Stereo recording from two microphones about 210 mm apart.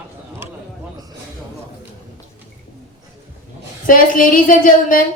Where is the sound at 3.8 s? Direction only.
40° left (ahead or behind).